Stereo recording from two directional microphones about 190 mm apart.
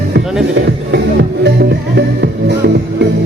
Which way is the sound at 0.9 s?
65° right (ahead or behind).